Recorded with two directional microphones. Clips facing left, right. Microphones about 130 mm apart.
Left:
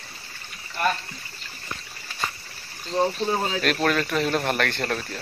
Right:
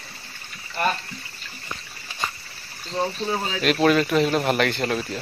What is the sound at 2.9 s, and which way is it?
Speech, 10° left (ahead or behind).